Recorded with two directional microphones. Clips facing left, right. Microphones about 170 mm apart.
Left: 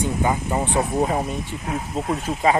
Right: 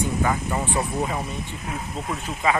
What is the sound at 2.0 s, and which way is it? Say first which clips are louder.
Speech: left 4 dB; 35° left (ahead or behind).